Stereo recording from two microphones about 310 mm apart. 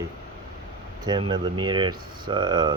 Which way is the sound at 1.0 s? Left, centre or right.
Centre.